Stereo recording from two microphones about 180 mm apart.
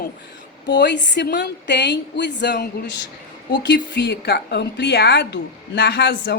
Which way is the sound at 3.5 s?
90° left.